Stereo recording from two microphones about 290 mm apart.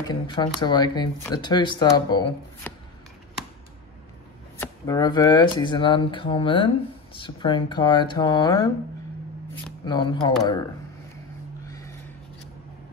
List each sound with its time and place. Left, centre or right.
0.1 s speech: centre
4.6 s speech: centre
9.8 s speech: centre